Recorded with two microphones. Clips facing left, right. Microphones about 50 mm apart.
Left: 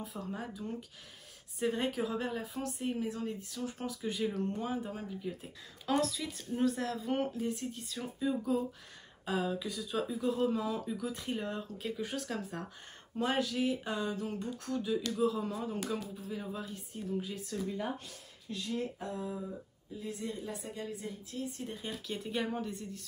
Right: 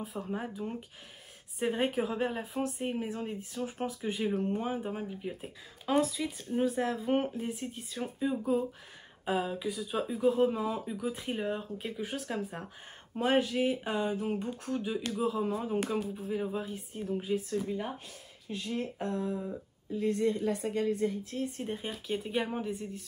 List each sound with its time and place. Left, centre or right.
0.0 s speech: centre
0.4 s speech: right
5.9 s speech: centre
13.1 s speech: right
18.9 s a woman's voice: right
22.0 s speech: centre